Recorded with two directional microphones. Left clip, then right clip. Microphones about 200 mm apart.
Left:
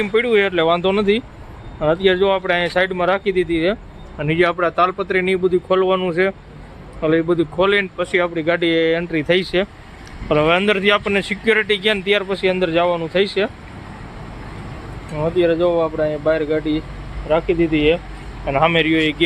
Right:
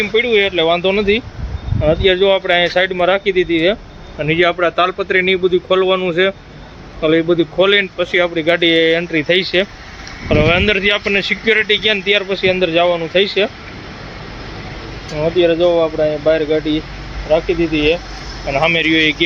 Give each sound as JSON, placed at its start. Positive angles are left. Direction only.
{"t": 0.0, "sound": "speech", "side_deg": 20}
{"t": 15.2, "sound": "speech", "side_deg": 0}
{"t": 17.2, "sound": "speech", "side_deg": 10}